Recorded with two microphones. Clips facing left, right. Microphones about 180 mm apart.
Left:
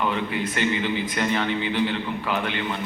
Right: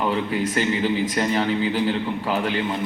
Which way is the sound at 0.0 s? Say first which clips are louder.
Right 3 dB; 35° right (ahead or behind).